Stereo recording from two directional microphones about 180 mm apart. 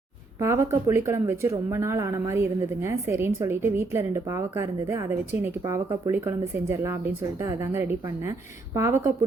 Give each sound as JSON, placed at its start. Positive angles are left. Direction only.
{"t": 0.3, "sound": "speech", "side_deg": -15}